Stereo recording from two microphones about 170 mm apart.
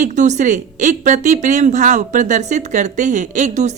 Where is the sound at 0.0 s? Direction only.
45° right (ahead or behind).